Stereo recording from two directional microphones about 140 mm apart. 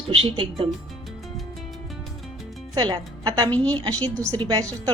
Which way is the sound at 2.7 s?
30° right (ahead or behind).